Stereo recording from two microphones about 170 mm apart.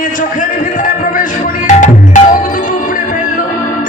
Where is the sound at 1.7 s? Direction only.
50° left (ahead or behind).